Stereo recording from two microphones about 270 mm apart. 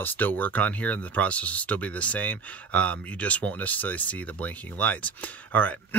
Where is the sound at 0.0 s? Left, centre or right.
Centre.